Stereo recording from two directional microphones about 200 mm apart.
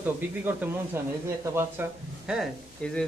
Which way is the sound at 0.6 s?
10° right (ahead or behind).